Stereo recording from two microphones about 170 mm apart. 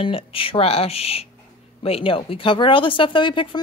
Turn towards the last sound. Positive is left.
turn(degrees=30)  # may be behind; listen again after turning